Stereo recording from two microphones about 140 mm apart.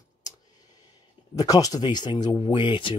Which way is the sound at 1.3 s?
25° left (ahead or behind).